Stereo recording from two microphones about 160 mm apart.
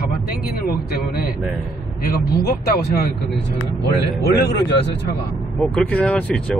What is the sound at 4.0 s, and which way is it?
Speech, 90° left.